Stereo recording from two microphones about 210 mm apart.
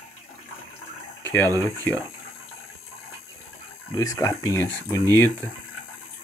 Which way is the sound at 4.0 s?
15° left (ahead or behind).